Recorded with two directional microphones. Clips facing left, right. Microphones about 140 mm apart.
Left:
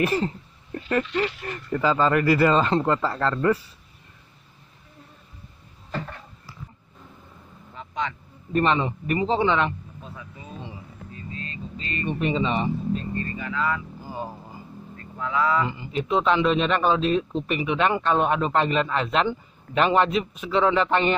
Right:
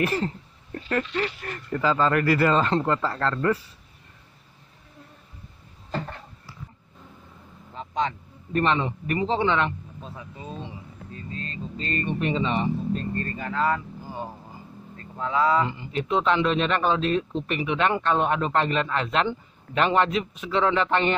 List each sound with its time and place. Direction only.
0.0 s speech: 20° left (ahead or behind)
7.7 s vehicle: 30° right (ahead or behind)
8.5 s speech: 15° left (ahead or behind)
10.0 s speech: 30° right (ahead or behind)
12.2 s speech: 10° left (ahead or behind)
12.9 s speech: 50° right (ahead or behind)
14.0 s a sound: 10° left (ahead or behind)
15.0 s speech: 30° right (ahead or behind)
15.8 s speech: 10° left (ahead or behind)